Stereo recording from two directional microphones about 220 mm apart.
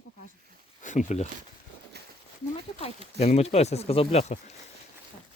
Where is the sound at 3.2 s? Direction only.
30° left (ahead or behind).